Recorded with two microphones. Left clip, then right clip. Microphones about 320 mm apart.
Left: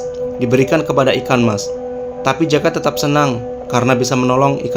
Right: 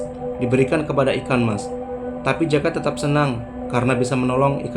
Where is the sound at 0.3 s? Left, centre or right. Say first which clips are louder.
Left 5 dB; left.